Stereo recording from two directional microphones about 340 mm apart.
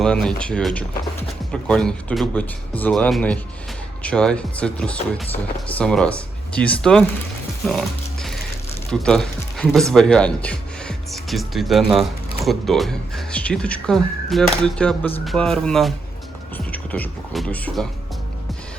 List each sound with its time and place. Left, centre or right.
0.0 s speech: centre
7.7 s music: centre
8.9 s speech: centre